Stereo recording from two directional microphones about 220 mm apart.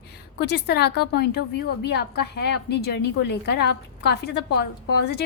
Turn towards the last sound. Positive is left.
turn(degrees=50)  # may be behind; listen again after turning